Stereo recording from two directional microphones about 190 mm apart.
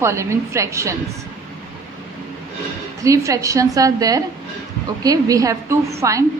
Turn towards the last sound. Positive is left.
turn(degrees=-15)  # may be behind; listen again after turning